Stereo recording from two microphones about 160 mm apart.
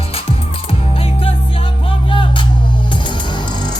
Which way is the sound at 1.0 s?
35° left (ahead or behind).